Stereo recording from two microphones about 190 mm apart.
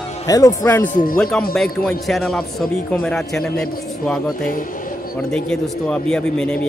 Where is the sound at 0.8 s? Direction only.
40° left (ahead or behind).